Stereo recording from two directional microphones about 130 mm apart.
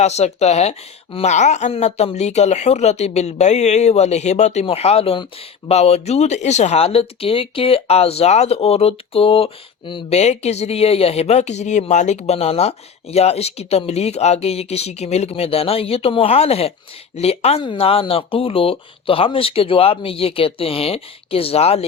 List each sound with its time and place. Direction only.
0.0 s speech: 55° left (ahead or behind)
10.2 s speech: 55° left (ahead or behind)
17.6 s speech: 40° left (ahead or behind)